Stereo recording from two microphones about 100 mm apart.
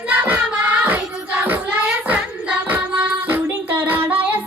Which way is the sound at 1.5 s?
15° right (ahead or behind).